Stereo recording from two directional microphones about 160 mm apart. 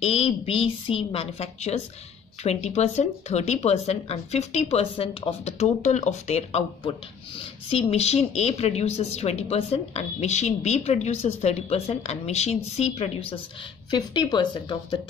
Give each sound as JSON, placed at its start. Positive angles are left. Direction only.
{"t": 0.0, "sound": "speech", "side_deg": 40}
{"t": 13.8, "sound": "a woman's voice", "side_deg": 25}